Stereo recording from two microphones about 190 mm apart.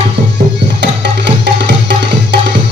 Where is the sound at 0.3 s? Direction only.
65° right (ahead or behind).